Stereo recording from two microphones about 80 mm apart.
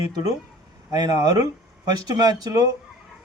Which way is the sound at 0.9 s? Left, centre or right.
Right.